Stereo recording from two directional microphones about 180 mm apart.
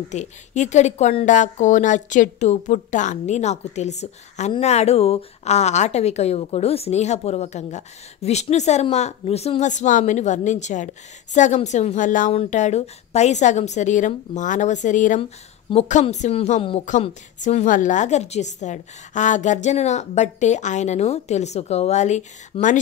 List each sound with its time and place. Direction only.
0.1 s speech: 40° left (ahead or behind)